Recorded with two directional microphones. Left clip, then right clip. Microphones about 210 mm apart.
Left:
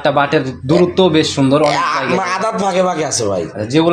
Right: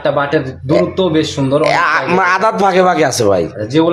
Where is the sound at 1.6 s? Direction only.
40° right (ahead or behind).